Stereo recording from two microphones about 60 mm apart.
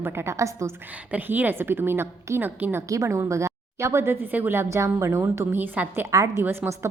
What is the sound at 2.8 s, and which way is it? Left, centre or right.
Speech, right.